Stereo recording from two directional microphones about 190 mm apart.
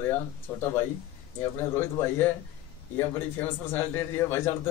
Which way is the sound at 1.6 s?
10° left (ahead or behind).